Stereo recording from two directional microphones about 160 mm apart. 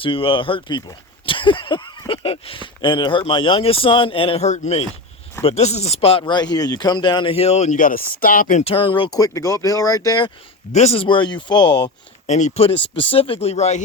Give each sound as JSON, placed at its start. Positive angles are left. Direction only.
{"t": 0.0, "sound": "speech", "side_deg": 35}
{"t": 8.6, "sound": "speech", "side_deg": 35}
{"t": 10.7, "sound": "speech", "side_deg": 45}
{"t": 12.2, "sound": "speech", "side_deg": 45}